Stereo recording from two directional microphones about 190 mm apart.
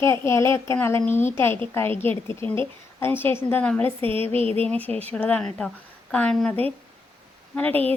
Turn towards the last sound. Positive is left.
turn(degrees=10)  # may be behind; listen again after turning